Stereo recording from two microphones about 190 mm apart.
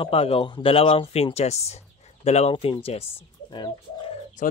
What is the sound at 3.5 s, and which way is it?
Bird, 25° left (ahead or behind).